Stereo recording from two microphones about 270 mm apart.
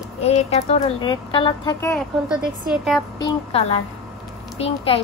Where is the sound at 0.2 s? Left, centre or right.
Left.